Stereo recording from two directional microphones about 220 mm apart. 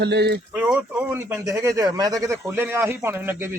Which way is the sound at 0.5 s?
5° right (ahead or behind).